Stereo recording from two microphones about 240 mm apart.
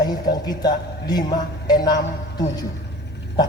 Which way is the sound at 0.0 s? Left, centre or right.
Centre.